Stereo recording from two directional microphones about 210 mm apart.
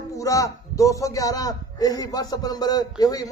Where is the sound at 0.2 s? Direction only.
15° left (ahead or behind).